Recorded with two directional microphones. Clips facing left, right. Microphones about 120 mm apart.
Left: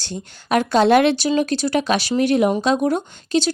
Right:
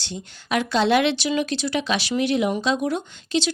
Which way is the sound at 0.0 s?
45° left (ahead or behind).